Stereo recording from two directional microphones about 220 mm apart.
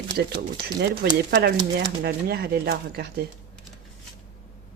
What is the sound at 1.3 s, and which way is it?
A woman's voice, 50° right (ahead or behind).